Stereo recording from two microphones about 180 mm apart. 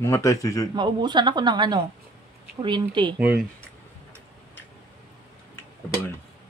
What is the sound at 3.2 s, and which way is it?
Speech, 10° right (ahead or behind).